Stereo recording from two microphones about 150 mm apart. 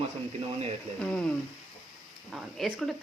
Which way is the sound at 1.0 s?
5° left (ahead or behind).